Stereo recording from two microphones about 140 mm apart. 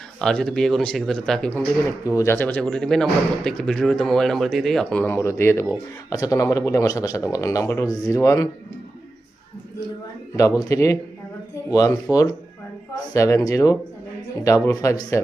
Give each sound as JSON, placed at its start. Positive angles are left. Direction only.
{"t": 0.2, "sound": "speech", "side_deg": 5}
{"t": 2.0, "sound": "a man's voice", "side_deg": 20}
{"t": 10.6, "sound": "a man's voice", "side_deg": 20}